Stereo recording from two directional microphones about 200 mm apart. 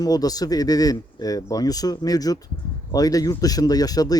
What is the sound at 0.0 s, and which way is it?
Speech, 20° left (ahead or behind).